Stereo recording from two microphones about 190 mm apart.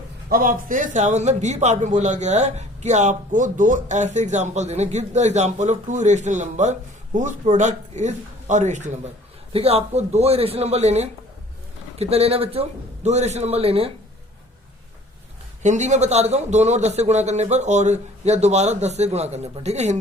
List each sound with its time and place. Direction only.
0.3 s a man's voice: 45° right (ahead or behind); by 13.9 s 30° right (ahead or behind)
15.6 s a man's voice: 40° right (ahead or behind)